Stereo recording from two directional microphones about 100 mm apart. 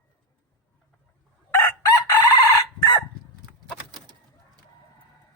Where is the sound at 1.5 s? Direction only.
35° left (ahead or behind).